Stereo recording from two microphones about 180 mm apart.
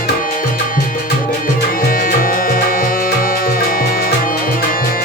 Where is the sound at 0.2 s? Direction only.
50° left (ahead or behind).